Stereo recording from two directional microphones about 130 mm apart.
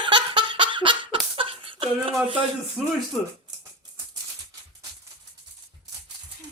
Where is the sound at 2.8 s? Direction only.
5° left (ahead or behind).